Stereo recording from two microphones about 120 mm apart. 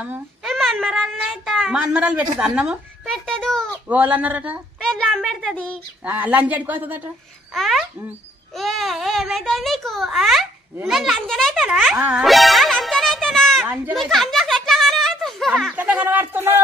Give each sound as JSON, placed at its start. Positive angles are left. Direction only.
{"t": 0.5, "sound": "a child's voice", "side_deg": 0}
{"t": 1.8, "sound": "a woman's voice", "side_deg": -10}
{"t": 3.1, "sound": "a child's voice", "side_deg": 5}
{"t": 3.9, "sound": "a woman's voice", "side_deg": -15}
{"t": 4.8, "sound": "speech", "side_deg": 5}
{"t": 6.0, "sound": "a woman's voice", "side_deg": -15}
{"t": 7.5, "sound": "a child's voice", "side_deg": 0}
{"t": 11.7, "sound": "a woman's voice", "side_deg": -10}
{"t": 12.3, "sound": "music", "side_deg": 0}
{"t": 14.1, "sound": "a sound", "side_deg": 0}
{"t": 15.7, "sound": "a woman's voice", "side_deg": -10}